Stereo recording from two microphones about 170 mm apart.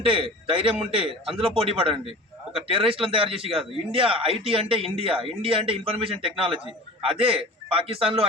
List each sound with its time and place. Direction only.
0.0 s a man's voice: 30° right (ahead or behind)